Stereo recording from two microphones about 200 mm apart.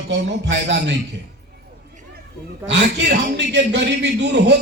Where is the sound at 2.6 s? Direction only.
60° right (ahead or behind).